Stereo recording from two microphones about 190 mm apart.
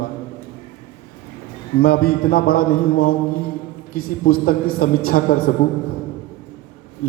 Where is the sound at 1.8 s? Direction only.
50° left (ahead or behind).